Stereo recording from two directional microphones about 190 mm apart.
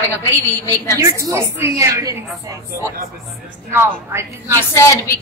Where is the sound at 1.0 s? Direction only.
15° right (ahead or behind).